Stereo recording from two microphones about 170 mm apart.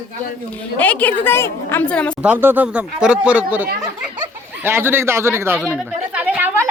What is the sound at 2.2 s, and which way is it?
Speech, 10° right (ahead or behind).